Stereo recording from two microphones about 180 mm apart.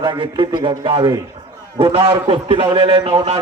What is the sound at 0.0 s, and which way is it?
A man's voice, 25° right (ahead or behind).